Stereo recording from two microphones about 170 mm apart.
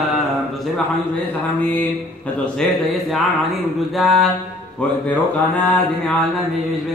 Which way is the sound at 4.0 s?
Centre (ahead or behind).